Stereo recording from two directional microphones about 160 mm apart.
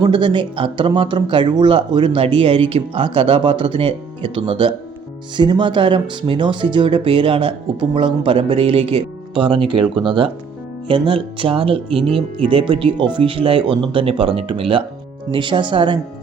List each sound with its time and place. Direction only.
0.0 s speech: 30° right (ahead or behind)